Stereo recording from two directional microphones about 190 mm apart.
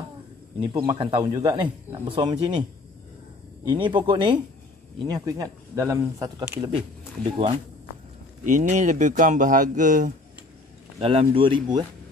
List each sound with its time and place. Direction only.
0.6 s speech: 25° right (ahead or behind)
3.6 s speech: 25° right (ahead or behind)
7.2 s speech: 30° right (ahead or behind)
8.5 s speech: 40° right (ahead or behind)
11.0 s speech: 30° right (ahead or behind)